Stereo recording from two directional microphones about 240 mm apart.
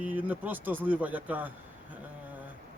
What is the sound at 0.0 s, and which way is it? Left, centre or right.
Speech, centre.